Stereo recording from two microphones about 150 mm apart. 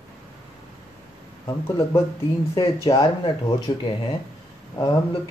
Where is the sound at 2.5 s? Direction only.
35° left (ahead or behind).